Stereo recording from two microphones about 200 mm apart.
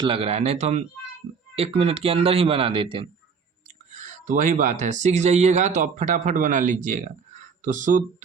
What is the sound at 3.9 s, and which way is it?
Speech, 40° right (ahead or behind).